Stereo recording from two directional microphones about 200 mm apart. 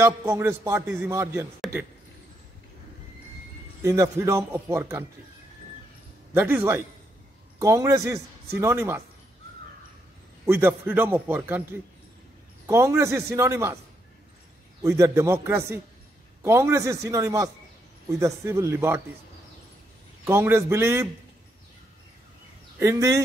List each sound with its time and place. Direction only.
0.0 s a man's voice: 10° right (ahead or behind)
3.8 s a man's voice: 15° right (ahead or behind)
6.3 s a man's voice: 10° right (ahead or behind)
10.4 s a man's voice: 10° right (ahead or behind)
12.6 s a man's voice: 15° right (ahead or behind)
14.8 s a man's voice: 15° right (ahead or behind)
20.2 s a man's voice: 15° right (ahead or behind)
22.8 s a man's voice: 15° right (ahead or behind)